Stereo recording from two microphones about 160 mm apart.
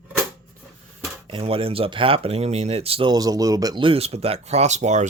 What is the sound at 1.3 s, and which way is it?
Speech, 35° right (ahead or behind).